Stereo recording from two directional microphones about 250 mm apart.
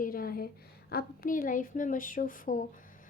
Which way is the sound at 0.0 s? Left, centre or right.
Left.